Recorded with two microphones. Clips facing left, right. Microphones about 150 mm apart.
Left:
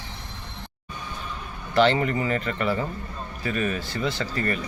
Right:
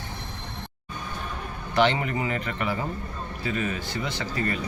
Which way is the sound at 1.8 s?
20° right (ahead or behind).